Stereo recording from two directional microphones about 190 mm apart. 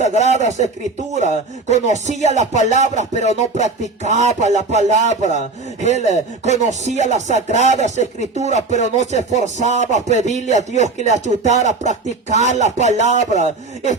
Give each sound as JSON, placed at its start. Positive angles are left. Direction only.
{"t": 0.0, "sound": "speech", "side_deg": -35}